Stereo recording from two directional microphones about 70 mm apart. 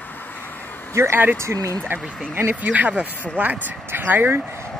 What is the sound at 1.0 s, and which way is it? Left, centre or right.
Speech, right.